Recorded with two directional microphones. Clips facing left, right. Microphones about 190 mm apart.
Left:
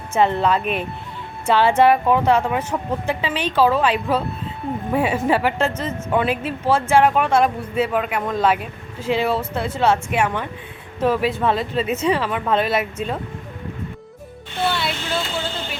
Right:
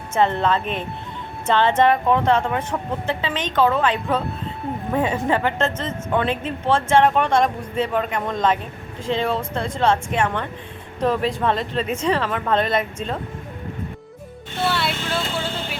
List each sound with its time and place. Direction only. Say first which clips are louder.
0.1 s a woman's voice: left 1 dB; 10° left (ahead or behind)
14.7 s vehicle: even; 5° right (ahead or behind)